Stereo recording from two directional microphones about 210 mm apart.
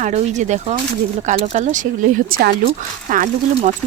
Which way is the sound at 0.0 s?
35° right (ahead or behind).